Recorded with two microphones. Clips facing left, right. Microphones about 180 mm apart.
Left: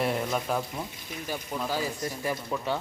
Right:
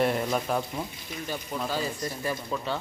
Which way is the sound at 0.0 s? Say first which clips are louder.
Right 2 dB; centre (ahead or behind).